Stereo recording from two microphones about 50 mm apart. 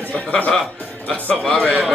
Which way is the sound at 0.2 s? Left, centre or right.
Left.